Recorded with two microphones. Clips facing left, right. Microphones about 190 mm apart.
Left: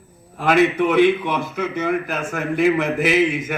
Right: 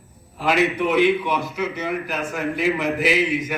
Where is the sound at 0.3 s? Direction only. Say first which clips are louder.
Left 4 dB; 50° left (ahead or behind).